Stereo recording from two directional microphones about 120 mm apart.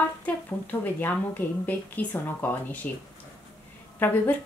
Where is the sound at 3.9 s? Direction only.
15° left (ahead or behind).